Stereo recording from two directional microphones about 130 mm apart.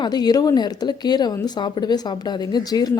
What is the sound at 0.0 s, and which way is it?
A woman's voice, 30° left (ahead or behind).